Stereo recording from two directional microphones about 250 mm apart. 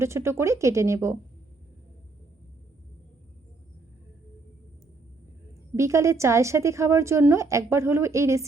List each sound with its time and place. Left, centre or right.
0.0 s a woman's voice: centre
5.7 s a woman's voice: centre